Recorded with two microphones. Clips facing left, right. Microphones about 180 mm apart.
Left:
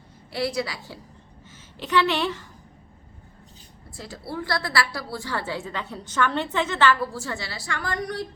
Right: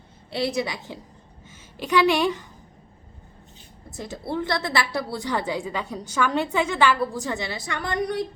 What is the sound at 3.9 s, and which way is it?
A woman's voice, 20° right (ahead or behind).